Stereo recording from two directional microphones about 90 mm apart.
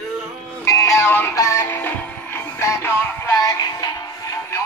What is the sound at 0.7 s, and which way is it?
Music, 35° left (ahead or behind).